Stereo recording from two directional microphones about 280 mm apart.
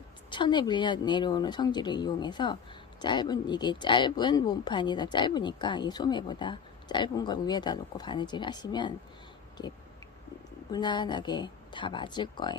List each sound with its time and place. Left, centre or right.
0.3 s speech: centre
10.7 s speech: centre